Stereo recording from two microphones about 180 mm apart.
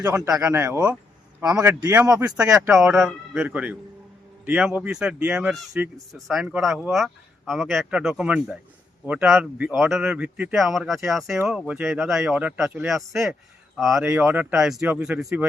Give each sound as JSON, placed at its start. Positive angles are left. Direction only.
{"t": 0.3, "sound": "speech", "side_deg": -20}
{"t": 2.8, "sound": "speech", "side_deg": 0}